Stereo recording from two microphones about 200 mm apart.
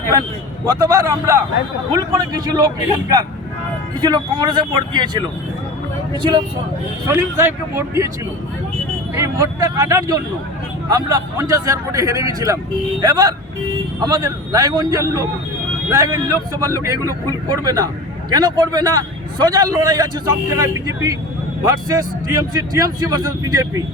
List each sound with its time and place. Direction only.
0.6 s a man's voice: 15° right (ahead or behind)
7.1 s speech: 10° right (ahead or behind)
9.2 s a man's voice: 15° right (ahead or behind)